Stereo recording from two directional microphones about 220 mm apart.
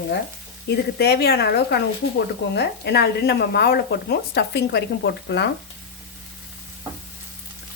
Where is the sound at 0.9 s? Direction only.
45° left (ahead or behind).